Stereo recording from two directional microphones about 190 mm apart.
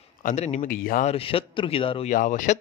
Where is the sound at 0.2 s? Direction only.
40° left (ahead or behind).